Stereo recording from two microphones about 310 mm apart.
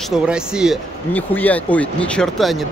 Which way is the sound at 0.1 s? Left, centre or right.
Centre.